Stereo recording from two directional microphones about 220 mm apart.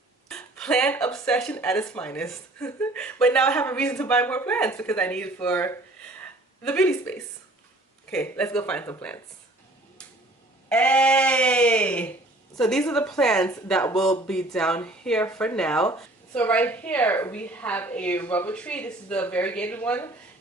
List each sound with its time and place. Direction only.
0.3 s a woman's voice: 5° left (ahead or behind)
10.7 s a woman's voice: 5° left (ahead or behind)